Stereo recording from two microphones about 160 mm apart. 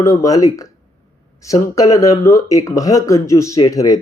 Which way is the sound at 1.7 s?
20° left (ahead or behind).